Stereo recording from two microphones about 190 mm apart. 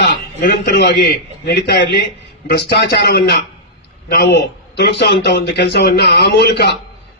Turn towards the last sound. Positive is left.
turn(degrees=60)  # may be behind; listen again after turning